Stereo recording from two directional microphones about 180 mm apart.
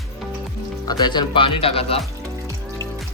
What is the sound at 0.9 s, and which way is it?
Speech, 25° left (ahead or behind).